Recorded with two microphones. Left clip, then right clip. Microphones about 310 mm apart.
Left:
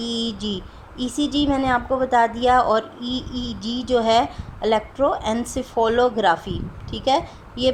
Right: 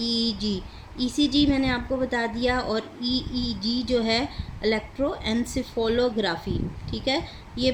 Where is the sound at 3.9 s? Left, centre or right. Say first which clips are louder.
Left 8 dB; left.